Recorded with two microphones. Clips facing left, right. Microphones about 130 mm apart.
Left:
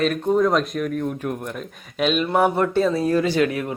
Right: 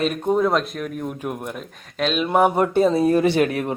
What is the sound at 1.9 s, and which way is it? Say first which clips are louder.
Speech: left 1 dB; 5° left (ahead or behind).